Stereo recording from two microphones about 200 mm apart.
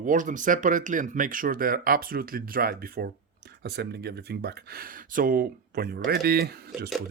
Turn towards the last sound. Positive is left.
turn(degrees=-50)  # may be behind; listen again after turning